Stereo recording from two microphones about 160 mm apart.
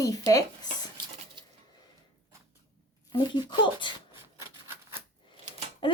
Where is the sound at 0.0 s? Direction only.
20° left (ahead or behind).